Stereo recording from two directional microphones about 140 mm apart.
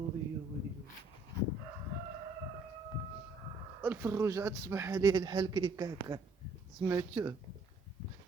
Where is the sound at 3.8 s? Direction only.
15° right (ahead or behind).